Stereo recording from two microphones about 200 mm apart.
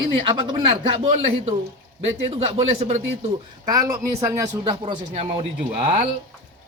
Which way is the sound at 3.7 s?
15° right (ahead or behind).